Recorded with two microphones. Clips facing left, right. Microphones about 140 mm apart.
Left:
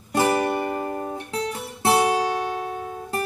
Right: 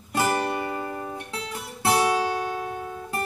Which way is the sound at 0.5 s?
50° left (ahead or behind).